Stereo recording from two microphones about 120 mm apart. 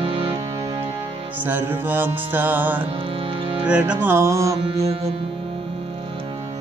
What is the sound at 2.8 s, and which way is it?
Music, 50° right (ahead or behind).